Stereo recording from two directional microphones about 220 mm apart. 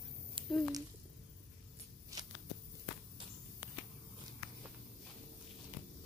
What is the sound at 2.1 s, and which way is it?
Shuffling cards, 15° right (ahead or behind).